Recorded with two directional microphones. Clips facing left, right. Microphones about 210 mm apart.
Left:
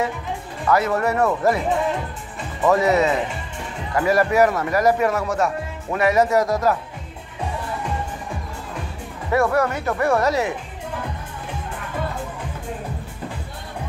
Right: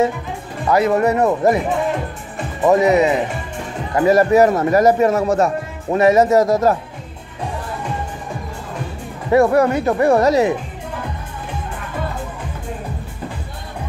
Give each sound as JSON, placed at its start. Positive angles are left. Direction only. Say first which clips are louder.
{"t": 0.7, "sound": "speech", "louder": "right 4 dB", "side_deg": -15}
{"t": 2.6, "sound": "speech", "louder": "right 4 dB", "side_deg": -20}
{"t": 9.3, "sound": "speech", "louder": "right 6 dB", "side_deg": -20}
{"t": 9.9, "sound": "speech", "louder": "right 5 dB", "side_deg": -35}